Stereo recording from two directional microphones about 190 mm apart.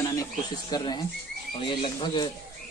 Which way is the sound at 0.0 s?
20° left (ahead or behind).